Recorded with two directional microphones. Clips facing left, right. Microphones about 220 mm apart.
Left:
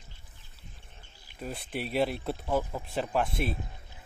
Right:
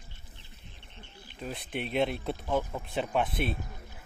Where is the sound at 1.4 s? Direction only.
5° left (ahead or behind).